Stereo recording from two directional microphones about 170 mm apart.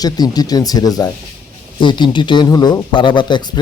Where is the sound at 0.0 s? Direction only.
20° left (ahead or behind).